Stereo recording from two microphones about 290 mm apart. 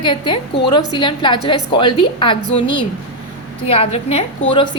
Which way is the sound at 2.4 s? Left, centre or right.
Left.